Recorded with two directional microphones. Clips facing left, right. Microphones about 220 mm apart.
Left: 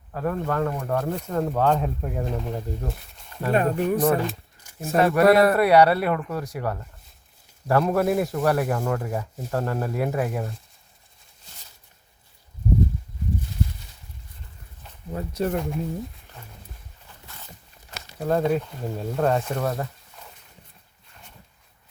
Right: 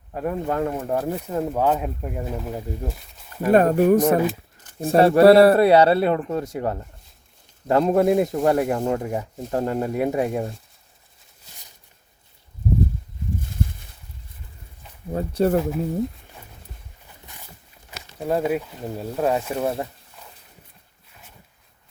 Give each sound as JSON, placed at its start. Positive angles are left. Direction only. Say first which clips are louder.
{"t": 0.1, "sound": "speech", "louder": "right 1 dB", "side_deg": -15}
{"t": 1.1, "sound": "speech", "louder": "right 1 dB", "side_deg": -10}
{"t": 3.5, "sound": "speech", "louder": "right 7 dB", "side_deg": -45}
{"t": 4.8, "sound": "speech", "louder": "right 5 dB", "side_deg": -30}
{"t": 15.1, "sound": "speech", "louder": "right 6 dB", "side_deg": -30}
{"t": 18.2, "sound": "speech", "louder": "even", "side_deg": -10}